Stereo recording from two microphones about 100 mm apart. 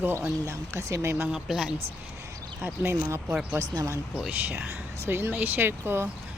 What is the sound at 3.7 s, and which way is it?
Speech, 35° right (ahead or behind).